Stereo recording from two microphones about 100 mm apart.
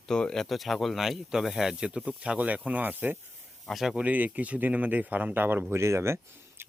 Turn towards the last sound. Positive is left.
turn(degrees=-30)  # may be behind; listen again after turning